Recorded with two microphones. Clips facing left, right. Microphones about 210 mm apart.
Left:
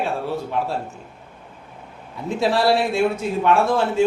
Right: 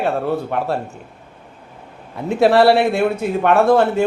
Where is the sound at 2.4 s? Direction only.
60° right (ahead or behind).